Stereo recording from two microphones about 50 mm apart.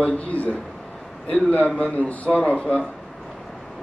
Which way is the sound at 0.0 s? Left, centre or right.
Left.